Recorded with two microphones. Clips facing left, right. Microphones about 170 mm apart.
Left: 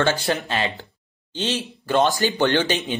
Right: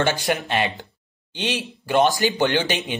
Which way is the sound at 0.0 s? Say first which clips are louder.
Even; 15° right (ahead or behind).